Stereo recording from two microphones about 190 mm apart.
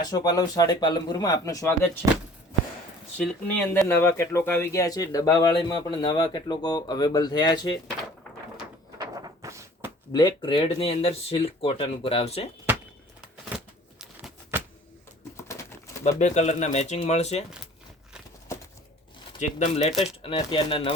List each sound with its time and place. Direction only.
0.1 s speech: 20° left (ahead or behind)
3.2 s speech: 10° left (ahead or behind)
9.0 s a sound: 15° right (ahead or behind)
10.1 s speech: 20° left (ahead or behind)
12.7 s a sound: 10° right (ahead or behind)
15.4 s bird: 15° left (ahead or behind)
16.0 s speech: 40° left (ahead or behind)
19.4 s speech: 40° left (ahead or behind)
19.9 s speech: centre (ahead or behind)
20.2 s speech: 25° left (ahead or behind)